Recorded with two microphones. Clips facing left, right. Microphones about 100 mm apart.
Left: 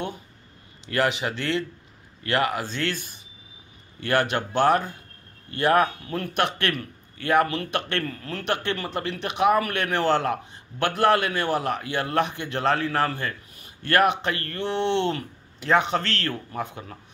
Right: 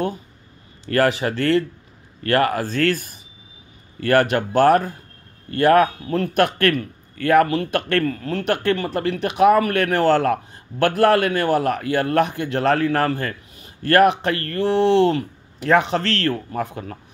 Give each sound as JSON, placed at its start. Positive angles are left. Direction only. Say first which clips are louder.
{"t": 0.8, "sound": "a man's voice", "louder": "right 6 dB", "side_deg": -45}